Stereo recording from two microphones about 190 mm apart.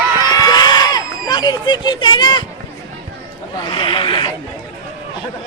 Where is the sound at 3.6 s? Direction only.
25° left (ahead or behind).